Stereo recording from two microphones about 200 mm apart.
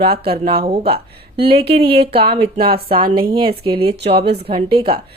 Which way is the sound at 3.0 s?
45° right (ahead or behind).